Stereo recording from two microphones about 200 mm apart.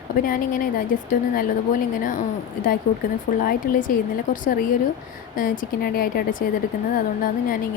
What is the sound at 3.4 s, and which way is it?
Speech, 45° left (ahead or behind).